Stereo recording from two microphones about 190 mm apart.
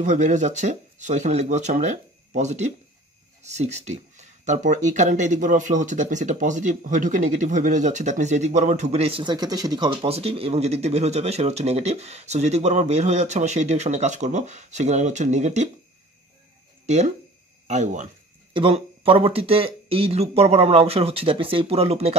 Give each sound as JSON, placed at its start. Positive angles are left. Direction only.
{"t": 0.0, "sound": "speech", "side_deg": -40}
{"t": 16.8, "sound": "speech", "side_deg": -35}
{"t": 18.5, "sound": "speech", "side_deg": -25}